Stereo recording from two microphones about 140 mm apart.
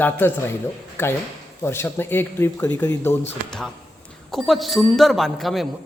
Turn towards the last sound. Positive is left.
turn(degrees=0)  # may be behind; listen again after turning